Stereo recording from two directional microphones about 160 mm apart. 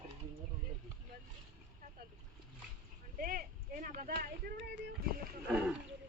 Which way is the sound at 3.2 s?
60° right (ahead or behind).